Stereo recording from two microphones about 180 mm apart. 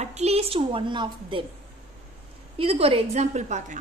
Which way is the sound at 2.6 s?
35° right (ahead or behind).